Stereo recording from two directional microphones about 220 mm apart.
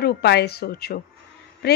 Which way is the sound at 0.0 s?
50° left (ahead or behind).